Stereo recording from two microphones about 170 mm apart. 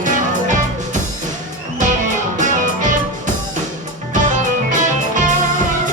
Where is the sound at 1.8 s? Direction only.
50° right (ahead or behind).